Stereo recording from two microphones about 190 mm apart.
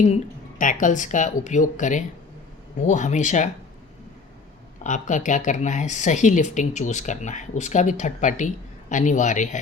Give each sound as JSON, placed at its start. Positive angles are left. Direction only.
{"t": 0.6, "sound": "speech", "side_deg": 45}
{"t": 4.8, "sound": "speech", "side_deg": 40}